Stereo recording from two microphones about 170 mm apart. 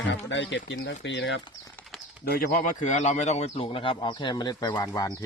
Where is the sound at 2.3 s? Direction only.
60° left (ahead or behind).